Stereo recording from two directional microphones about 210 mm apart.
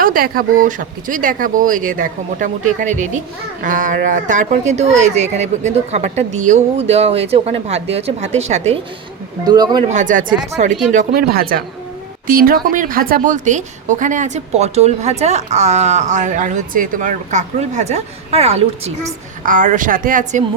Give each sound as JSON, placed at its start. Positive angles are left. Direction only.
{"t": 0.0, "sound": "a woman's voice", "side_deg": -45}
{"t": 9.5, "sound": "a man's voice", "side_deg": -20}
{"t": 9.9, "sound": "a woman's voice", "side_deg": -35}